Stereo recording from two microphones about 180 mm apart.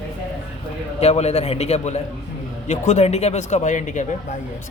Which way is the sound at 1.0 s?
35° left (ahead or behind).